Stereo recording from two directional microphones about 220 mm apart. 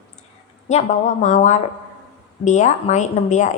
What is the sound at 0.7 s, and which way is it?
Speech, 30° left (ahead or behind).